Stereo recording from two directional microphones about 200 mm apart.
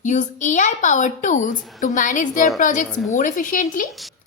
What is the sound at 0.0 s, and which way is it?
A woman's voice, 35° left (ahead or behind).